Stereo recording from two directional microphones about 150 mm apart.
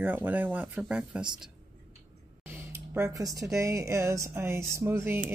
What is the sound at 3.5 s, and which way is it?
Speech, 20° right (ahead or behind).